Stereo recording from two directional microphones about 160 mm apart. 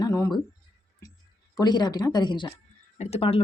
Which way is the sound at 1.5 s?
25° left (ahead or behind).